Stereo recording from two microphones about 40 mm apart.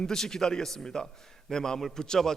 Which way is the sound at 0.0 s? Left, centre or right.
Centre.